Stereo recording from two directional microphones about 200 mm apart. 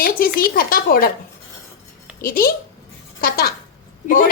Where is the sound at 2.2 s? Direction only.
45° left (ahead or behind).